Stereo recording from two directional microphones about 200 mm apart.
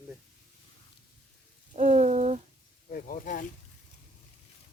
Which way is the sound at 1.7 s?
35° right (ahead or behind).